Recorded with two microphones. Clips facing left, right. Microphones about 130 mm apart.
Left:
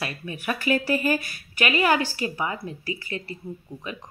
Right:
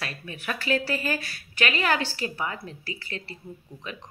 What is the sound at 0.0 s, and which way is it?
Speech, 10° left (ahead or behind).